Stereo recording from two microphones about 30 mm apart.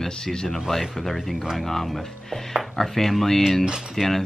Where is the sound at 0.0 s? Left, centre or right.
Left.